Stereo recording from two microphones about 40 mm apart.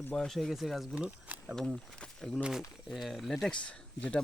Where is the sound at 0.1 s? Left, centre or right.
Centre.